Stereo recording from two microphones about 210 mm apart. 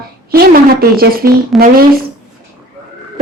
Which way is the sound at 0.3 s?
45° right (ahead or behind).